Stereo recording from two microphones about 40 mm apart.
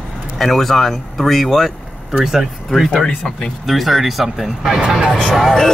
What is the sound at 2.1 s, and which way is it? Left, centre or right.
Speech, centre.